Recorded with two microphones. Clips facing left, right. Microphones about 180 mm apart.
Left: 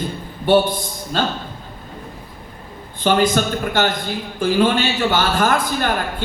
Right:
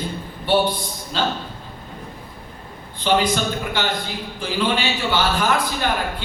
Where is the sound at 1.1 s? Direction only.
50° left (ahead or behind).